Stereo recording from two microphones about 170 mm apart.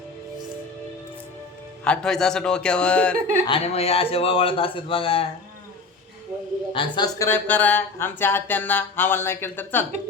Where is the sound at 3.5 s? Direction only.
35° left (ahead or behind).